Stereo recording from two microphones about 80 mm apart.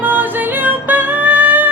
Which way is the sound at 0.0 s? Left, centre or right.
Right.